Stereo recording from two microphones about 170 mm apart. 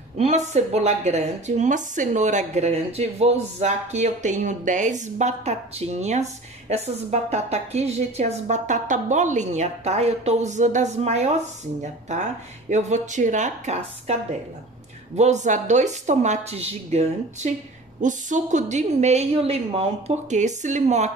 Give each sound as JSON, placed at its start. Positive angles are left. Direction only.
{"t": 0.2, "sound": "a woman's voice", "side_deg": -40}
{"t": 15.1, "sound": "a woman's voice", "side_deg": -45}